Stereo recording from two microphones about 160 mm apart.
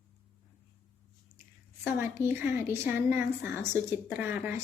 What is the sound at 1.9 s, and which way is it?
A woman's voice, 15° right (ahead or behind).